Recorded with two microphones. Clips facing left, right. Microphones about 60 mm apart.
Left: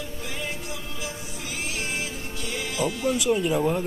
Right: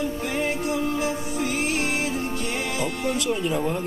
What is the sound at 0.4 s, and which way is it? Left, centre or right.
Music, right.